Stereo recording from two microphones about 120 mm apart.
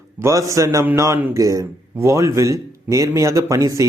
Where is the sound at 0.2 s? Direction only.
25° right (ahead or behind).